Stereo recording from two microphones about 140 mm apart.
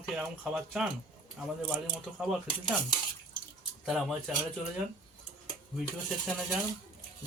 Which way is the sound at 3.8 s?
5° right (ahead or behind).